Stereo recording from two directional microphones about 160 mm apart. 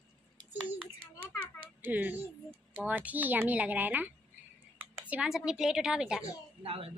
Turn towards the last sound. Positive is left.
turn(degrees=-35)  # may be behind; listen again after turning